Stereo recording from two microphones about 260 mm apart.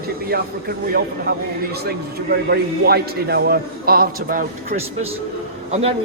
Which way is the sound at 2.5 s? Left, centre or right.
Right.